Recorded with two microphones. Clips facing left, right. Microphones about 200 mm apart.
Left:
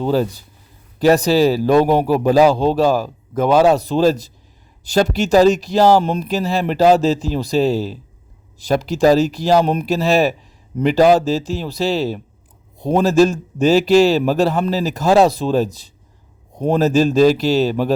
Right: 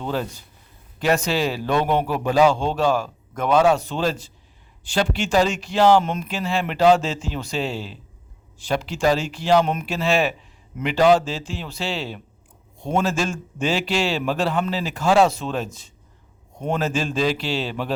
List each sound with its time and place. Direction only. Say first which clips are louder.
0.0 s a man's voice: left 9 dB; 35° left (ahead or behind)